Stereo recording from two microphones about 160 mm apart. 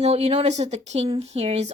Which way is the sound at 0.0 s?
40° right (ahead or behind).